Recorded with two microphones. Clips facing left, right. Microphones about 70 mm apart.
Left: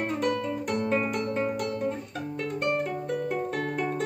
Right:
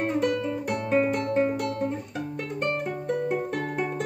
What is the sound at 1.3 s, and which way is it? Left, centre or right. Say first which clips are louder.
Music: right 5 dB; centre.